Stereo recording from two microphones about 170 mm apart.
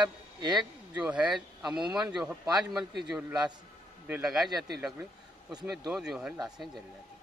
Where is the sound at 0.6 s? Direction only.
10° right (ahead or behind).